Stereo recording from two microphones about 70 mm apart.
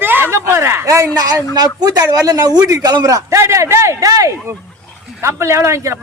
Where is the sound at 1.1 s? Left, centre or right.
Right.